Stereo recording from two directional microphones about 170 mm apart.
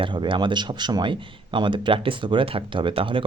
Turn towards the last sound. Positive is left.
turn(degrees=-30)  # may be behind; listen again after turning